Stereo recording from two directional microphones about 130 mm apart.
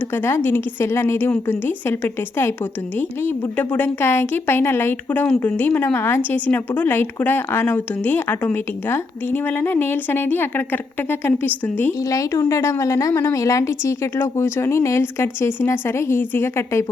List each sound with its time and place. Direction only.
0.3 s a woman's voice: 20° left (ahead or behind)
3.2 s a woman's voice: 15° left (ahead or behind)